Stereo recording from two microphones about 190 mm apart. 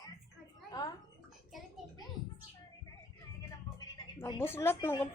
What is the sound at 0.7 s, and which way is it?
Speech, 20° left (ahead or behind).